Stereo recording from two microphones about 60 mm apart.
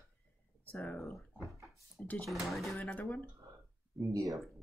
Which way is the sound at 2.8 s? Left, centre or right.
Left.